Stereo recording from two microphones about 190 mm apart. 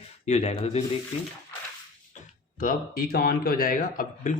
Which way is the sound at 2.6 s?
50° left (ahead or behind).